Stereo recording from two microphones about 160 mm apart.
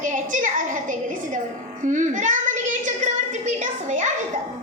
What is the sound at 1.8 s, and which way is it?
Child singing, 50° right (ahead or behind).